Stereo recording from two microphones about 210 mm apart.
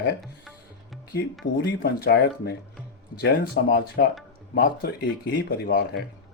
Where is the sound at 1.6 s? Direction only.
45° left (ahead or behind).